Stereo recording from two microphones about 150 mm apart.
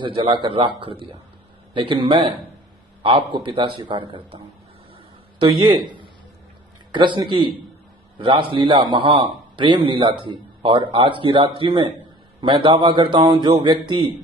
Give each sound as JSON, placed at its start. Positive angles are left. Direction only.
{"t": 0.0, "sound": "a man's voice", "side_deg": -35}
{"t": 5.4, "sound": "a man's voice", "side_deg": -35}